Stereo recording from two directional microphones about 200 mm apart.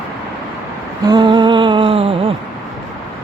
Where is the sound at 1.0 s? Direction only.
20° right (ahead or behind).